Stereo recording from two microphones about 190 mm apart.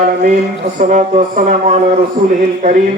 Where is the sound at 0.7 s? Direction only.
40° right (ahead or behind).